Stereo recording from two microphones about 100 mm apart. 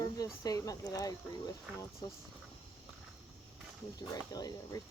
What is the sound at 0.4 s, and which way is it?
Speech, 40° left (ahead or behind).